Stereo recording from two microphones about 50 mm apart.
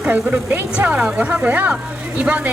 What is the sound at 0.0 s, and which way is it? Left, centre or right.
Speech, right.